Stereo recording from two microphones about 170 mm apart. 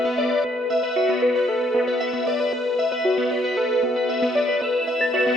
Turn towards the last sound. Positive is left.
turn(degrees=0)  # may be behind; listen again after turning